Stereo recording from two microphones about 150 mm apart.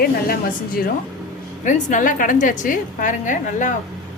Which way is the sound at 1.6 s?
60° left (ahead or behind).